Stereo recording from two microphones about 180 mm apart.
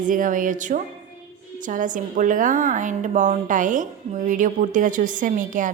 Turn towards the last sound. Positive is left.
turn(degrees=-45)  # may be behind; listen again after turning